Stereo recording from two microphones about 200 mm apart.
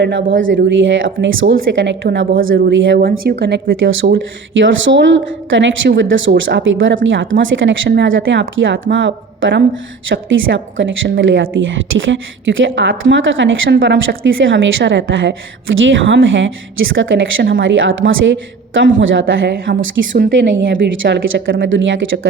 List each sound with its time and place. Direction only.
0.0 s speech: 50° right (ahead or behind)
0.3 s a woman's voice: 70° right (ahead or behind); by 4.2 s 50° right (ahead or behind)
4.5 s a woman's voice: 70° right (ahead or behind)